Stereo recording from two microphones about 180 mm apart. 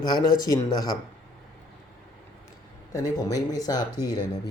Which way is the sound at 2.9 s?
20° left (ahead or behind).